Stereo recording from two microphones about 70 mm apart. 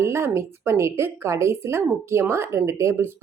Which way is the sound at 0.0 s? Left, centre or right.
Right.